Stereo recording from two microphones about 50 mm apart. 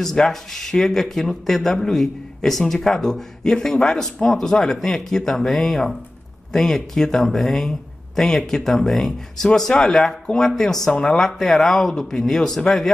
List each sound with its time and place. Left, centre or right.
0.0 s speech: centre
11.2 s speech: centre